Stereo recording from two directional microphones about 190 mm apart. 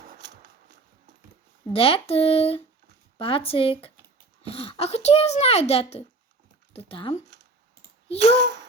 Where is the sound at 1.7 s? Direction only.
30° left (ahead or behind).